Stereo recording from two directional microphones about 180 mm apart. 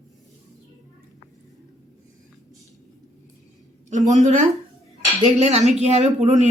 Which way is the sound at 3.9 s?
40° right (ahead or behind).